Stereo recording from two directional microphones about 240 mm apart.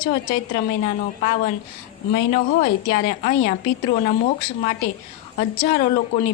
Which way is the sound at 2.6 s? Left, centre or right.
Left.